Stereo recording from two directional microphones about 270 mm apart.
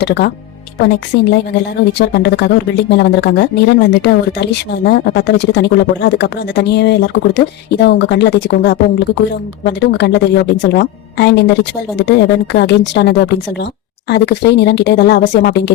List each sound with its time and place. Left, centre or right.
0.0 s a woman's voice: left